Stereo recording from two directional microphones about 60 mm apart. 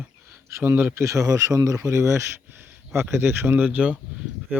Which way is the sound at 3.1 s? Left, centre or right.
Right.